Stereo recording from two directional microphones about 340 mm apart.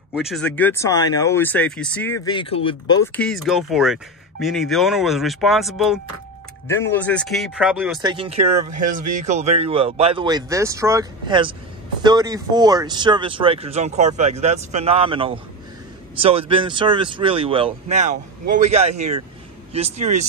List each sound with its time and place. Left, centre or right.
0.1 s speech: centre
2.2 s speech: centre